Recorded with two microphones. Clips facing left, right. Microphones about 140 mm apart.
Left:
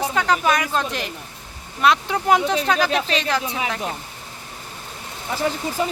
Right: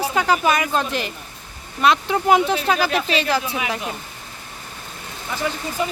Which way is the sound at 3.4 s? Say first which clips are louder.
Even; 30° left (ahead or behind).